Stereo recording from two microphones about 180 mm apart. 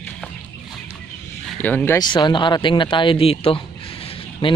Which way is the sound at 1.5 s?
10° left (ahead or behind).